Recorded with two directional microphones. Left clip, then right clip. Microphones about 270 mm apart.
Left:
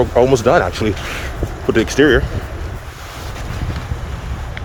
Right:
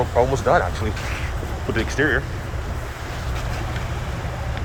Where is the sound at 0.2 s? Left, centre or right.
Left.